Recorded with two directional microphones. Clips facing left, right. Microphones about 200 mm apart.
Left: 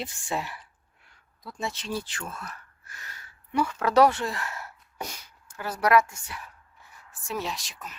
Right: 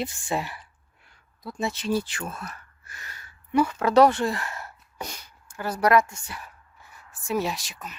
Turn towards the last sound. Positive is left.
turn(degrees=0)  # may be behind; listen again after turning